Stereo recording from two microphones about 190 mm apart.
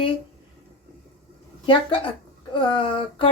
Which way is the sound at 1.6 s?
25° left (ahead or behind).